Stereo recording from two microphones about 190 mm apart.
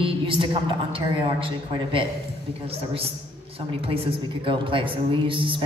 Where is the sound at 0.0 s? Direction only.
25° right (ahead or behind).